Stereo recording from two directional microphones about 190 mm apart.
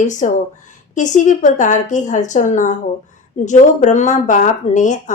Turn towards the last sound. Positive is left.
turn(degrees=40)  # may be behind; listen again after turning